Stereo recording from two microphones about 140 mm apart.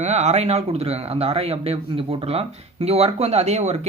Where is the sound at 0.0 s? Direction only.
55° right (ahead or behind).